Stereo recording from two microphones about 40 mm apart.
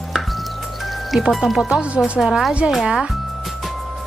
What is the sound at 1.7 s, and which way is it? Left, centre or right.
Speech, right.